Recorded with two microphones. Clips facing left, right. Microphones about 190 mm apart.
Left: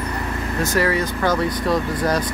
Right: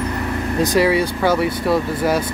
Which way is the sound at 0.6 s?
15° right (ahead or behind).